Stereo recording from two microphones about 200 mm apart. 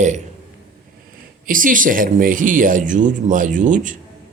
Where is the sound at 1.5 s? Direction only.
40° right (ahead or behind).